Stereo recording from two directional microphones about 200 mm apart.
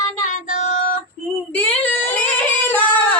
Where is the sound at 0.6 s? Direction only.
35° left (ahead or behind).